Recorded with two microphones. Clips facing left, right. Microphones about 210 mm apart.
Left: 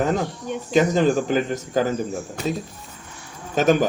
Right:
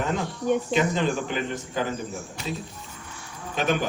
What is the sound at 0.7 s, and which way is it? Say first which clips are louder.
Speech: left 6 dB; 40° left (ahead or behind).